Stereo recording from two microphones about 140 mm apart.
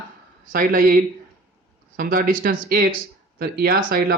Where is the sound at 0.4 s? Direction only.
85° right.